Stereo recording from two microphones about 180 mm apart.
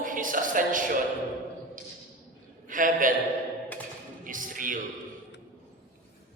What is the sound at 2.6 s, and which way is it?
Speech, 50° right (ahead or behind).